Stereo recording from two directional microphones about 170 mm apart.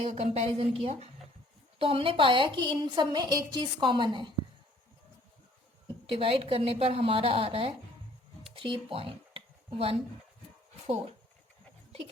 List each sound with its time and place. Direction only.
0.0 s a woman's voice: 40° right (ahead or behind)
6.1 s a woman's voice: 30° right (ahead or behind)
8.4 s a sound: 30° right (ahead or behind)